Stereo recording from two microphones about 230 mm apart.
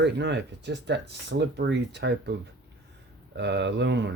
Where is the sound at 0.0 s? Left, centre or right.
Right.